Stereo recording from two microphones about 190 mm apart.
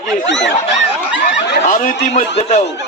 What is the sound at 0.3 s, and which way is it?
Speech, 70° left (ahead or behind).